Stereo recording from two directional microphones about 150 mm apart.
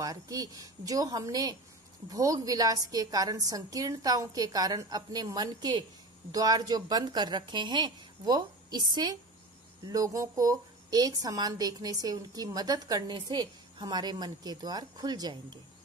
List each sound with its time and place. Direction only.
0.0 s a woman's voice: 25° right (ahead or behind)